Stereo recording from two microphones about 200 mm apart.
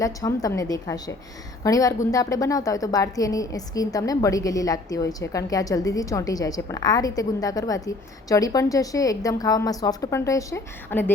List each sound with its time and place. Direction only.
0.0 s a woman's voice: 15° left (ahead or behind)